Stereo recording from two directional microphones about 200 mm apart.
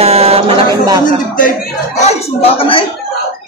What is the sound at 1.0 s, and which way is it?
Speech, 40° left (ahead or behind).